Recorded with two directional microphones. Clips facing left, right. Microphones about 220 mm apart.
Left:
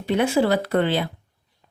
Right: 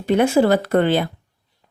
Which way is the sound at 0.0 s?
45° right (ahead or behind).